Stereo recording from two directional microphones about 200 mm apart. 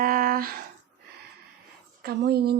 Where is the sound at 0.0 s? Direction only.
45° right (ahead or behind).